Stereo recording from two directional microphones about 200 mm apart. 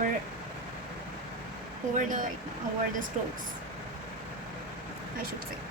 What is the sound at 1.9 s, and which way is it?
Speech, 40° right (ahead or behind).